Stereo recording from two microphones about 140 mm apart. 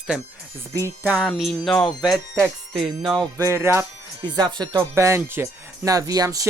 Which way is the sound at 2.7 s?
35° right (ahead or behind).